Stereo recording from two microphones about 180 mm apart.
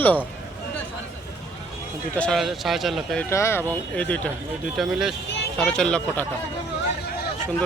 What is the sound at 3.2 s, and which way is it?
Speech, 15° left (ahead or behind).